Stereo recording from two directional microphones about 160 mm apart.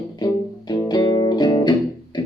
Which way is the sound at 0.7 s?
25° left (ahead or behind).